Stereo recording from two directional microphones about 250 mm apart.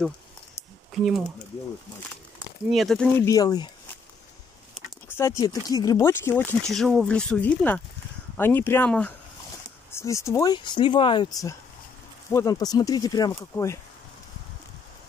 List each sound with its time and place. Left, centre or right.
0.9 s speech: centre
2.7 s speech: centre
5.0 s speech: centre
12.3 s speech: centre